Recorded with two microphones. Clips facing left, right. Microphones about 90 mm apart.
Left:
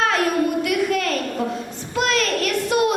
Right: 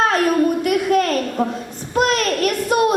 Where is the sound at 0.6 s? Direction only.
45° right (ahead or behind).